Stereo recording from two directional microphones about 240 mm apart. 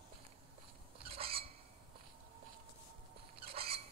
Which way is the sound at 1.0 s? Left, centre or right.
Right.